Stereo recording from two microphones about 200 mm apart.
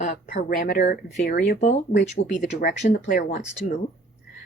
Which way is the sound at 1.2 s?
55° left (ahead or behind).